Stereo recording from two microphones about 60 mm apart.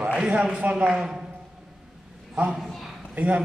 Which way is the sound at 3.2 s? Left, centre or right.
Right.